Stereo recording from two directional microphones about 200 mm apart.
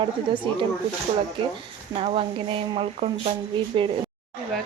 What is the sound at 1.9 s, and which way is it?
A woman's voice, 30° right (ahead or behind).